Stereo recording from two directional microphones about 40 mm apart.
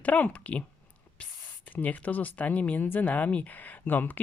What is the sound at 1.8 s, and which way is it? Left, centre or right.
Speech, left.